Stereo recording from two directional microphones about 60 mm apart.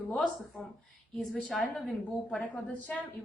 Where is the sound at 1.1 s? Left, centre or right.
Centre.